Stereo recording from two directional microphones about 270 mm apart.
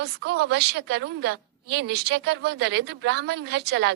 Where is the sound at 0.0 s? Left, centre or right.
Right.